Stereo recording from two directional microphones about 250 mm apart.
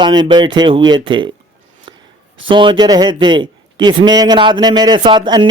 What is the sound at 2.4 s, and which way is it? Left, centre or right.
A man's voice, centre.